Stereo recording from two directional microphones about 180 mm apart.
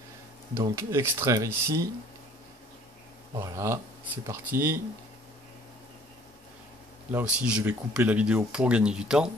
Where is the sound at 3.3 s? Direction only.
15° right (ahead or behind).